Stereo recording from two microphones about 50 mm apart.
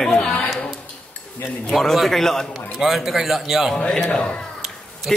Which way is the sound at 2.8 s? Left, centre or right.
Centre.